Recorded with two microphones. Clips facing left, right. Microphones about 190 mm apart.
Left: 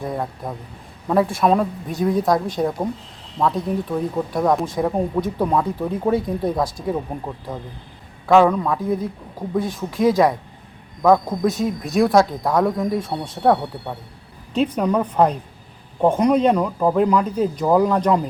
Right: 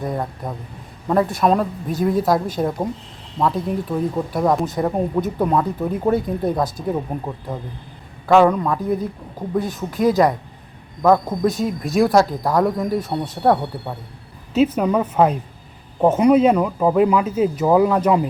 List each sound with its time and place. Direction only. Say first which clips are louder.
0.0 s speech: right 1 dB; centre (ahead or behind)